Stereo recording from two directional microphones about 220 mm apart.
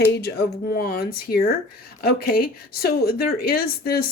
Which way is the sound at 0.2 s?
50° left (ahead or behind).